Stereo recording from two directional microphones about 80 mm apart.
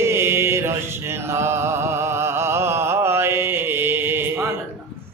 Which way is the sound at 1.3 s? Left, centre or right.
Right.